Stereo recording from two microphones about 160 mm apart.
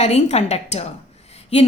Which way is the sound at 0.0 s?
40° left (ahead or behind).